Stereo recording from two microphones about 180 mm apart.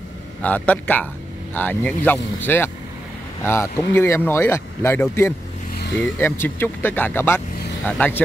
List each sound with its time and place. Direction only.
0.4 s speech: 10° left (ahead or behind)